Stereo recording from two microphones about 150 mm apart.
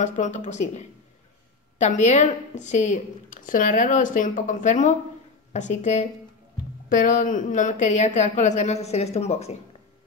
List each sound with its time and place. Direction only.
0.0 s a woman's voice: 55° left (ahead or behind)